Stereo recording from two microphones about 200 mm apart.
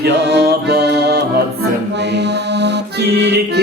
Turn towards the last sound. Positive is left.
turn(degrees=-55)  # may be behind; listen again after turning